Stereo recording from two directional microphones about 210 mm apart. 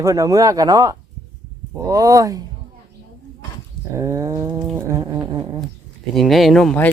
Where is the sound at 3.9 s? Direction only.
15° right (ahead or behind).